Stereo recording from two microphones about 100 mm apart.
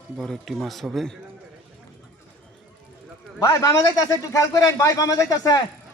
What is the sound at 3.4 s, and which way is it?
A man's voice, 35° left (ahead or behind).